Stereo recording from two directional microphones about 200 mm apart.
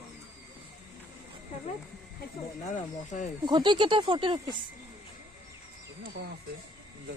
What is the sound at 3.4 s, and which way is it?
Speech, 20° right (ahead or behind).